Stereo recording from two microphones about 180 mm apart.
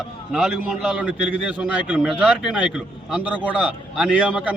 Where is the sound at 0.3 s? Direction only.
Centre (ahead or behind).